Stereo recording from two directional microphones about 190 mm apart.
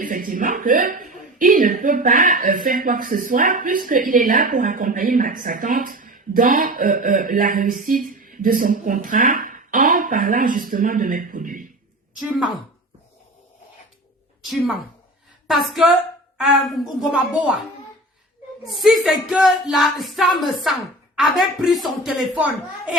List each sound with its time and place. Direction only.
0.0 s speech: 45° right (ahead or behind)
15.4 s speech: centre (ahead or behind)
18.6 s speech: centre (ahead or behind)